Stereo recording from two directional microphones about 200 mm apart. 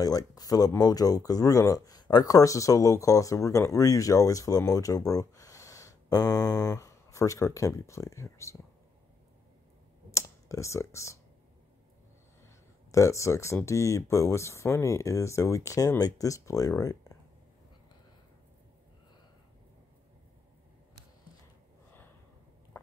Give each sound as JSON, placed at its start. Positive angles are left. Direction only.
{"t": 0.0, "sound": "speech", "side_deg": 20}
{"t": 10.1, "sound": "computer keyboard", "side_deg": 15}
{"t": 12.9, "sound": "speech", "side_deg": 15}